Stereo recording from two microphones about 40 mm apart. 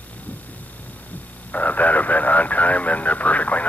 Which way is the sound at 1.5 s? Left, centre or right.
Left.